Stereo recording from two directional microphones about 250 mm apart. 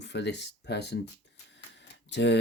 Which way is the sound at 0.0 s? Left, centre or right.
Left.